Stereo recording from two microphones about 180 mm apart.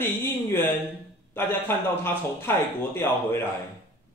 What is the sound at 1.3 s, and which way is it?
Speech, 15° left (ahead or behind).